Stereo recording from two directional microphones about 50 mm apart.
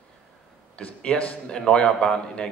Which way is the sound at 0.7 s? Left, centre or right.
Left.